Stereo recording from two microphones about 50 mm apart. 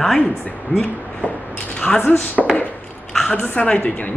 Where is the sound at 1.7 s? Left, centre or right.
Centre.